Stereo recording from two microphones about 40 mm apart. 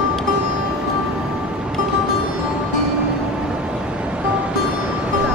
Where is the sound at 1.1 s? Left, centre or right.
Right.